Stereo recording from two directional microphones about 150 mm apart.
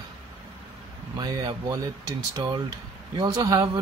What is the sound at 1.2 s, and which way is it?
Speech, 25° right (ahead or behind).